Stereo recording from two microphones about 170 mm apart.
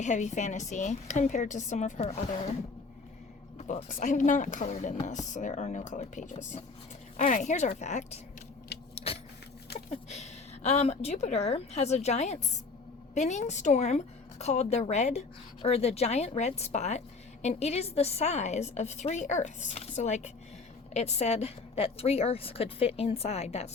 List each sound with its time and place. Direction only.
0.0 s a woman's voice: 45° left (ahead or behind)
3.6 s a woman's voice: 45° left (ahead or behind)
8.7 s vehicle: 80° left
9.1 s vehicle: 35° left (ahead or behind)
9.9 s a woman's voice: 40° left (ahead or behind)